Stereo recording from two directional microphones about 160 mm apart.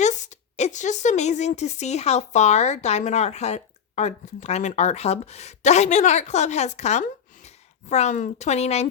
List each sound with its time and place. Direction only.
0.0 s a woman's voice: 50° left (ahead or behind)